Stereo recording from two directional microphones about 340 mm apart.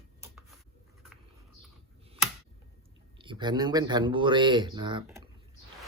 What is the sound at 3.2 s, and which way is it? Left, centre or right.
Speech, centre.